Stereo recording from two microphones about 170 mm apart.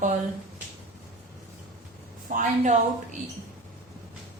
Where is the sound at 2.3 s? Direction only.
45° right (ahead or behind).